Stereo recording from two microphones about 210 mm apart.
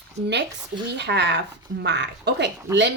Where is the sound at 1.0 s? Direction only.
55° right (ahead or behind).